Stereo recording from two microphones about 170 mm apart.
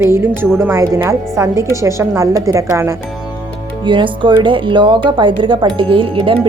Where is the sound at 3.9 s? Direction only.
30° right (ahead or behind).